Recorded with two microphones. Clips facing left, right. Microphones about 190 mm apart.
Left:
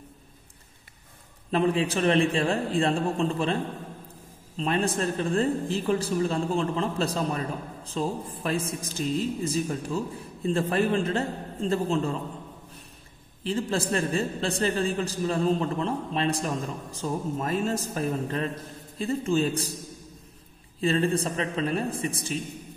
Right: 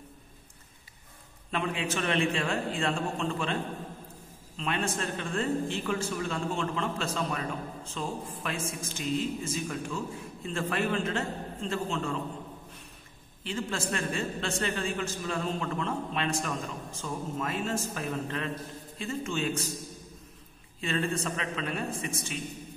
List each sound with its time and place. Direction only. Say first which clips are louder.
1.5 s speech: left 8 dB; 35° left (ahead or behind)
4.6 s speech: left 6 dB; 35° left (ahead or behind)
13.4 s speech: left 6 dB; 35° left (ahead or behind)
20.8 s speech: left 6 dB; 35° left (ahead or behind)